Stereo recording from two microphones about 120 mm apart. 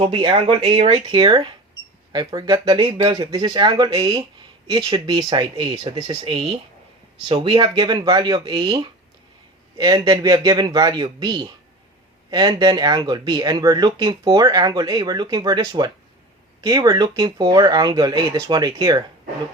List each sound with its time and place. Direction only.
0.0 s speech: 45° right (ahead or behind)
3.3 s speech: 35° right (ahead or behind)
5.1 s speech: 45° right (ahead or behind)